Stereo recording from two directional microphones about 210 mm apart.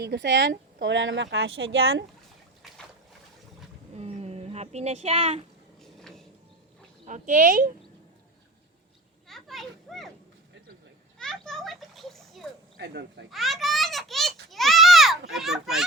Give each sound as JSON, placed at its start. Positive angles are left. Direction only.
{"t": 0.0, "sound": "speech", "side_deg": -55}
{"t": 2.6, "sound": "boat", "side_deg": 0}
{"t": 3.9, "sound": "speech", "side_deg": -30}
{"t": 5.8, "sound": "vehicle", "side_deg": 0}
{"t": 7.0, "sound": "speech", "side_deg": -35}
{"t": 9.2, "sound": "children playing", "side_deg": 0}
{"t": 11.2, "sound": "children playing", "side_deg": 0}
{"t": 12.8, "sound": "speech", "side_deg": -55}
{"t": 13.3, "sound": "a sound", "side_deg": 0}